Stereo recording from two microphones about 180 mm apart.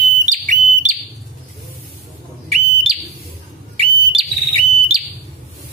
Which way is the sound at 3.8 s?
35° right (ahead or behind).